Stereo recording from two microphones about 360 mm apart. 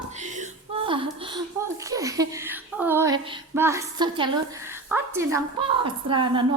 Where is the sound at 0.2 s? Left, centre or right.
Centre.